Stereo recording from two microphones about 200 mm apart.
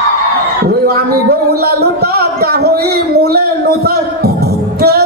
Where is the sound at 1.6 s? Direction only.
50° right (ahead or behind).